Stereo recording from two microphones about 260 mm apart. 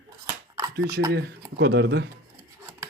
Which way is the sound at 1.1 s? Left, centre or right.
Right.